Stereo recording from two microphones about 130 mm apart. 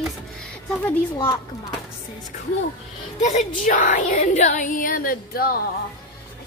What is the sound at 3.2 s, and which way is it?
Speech, 65° left (ahead or behind).